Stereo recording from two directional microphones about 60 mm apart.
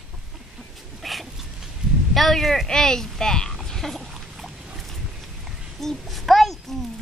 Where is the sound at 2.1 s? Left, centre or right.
Centre.